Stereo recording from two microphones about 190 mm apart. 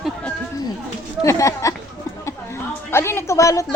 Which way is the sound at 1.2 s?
15° left (ahead or behind).